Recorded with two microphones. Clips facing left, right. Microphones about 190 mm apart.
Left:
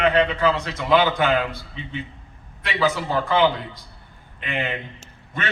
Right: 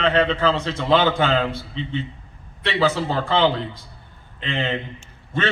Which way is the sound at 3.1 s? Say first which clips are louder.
Left 2 dB; 30° right (ahead or behind).